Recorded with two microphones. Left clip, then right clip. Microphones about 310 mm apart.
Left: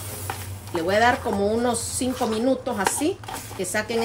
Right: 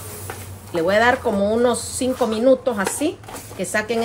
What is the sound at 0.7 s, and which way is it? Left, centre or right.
Speech, centre.